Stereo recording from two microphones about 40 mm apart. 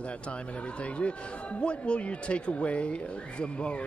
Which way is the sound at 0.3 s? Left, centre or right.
Left.